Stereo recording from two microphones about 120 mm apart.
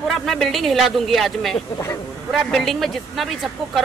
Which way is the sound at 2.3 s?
Centre (ahead or behind).